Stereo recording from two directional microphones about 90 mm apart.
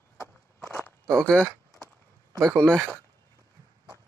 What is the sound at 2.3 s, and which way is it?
Speech, 35° right (ahead or behind).